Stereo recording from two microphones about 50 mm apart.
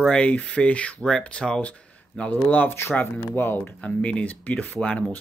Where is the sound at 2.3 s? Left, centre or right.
Left.